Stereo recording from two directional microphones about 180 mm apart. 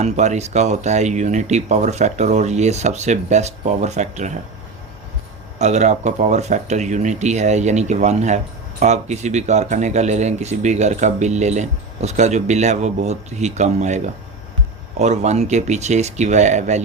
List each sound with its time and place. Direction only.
0.0 s speech: 40° right (ahead or behind)
5.5 s speech: 40° right (ahead or behind)